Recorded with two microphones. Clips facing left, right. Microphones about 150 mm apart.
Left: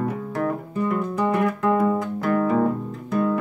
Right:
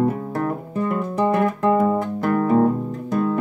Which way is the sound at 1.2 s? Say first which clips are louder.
Right 3 dB; 30° right (ahead or behind).